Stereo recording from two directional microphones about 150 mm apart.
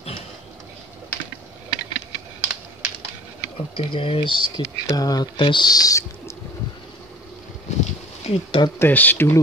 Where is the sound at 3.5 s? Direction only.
35° left (ahead or behind).